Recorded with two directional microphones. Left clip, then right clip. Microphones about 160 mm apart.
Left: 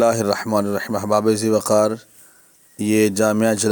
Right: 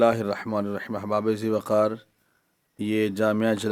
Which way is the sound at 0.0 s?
25° left (ahead or behind).